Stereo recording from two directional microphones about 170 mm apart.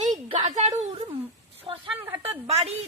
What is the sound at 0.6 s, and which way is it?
Speech, 40° right (ahead or behind).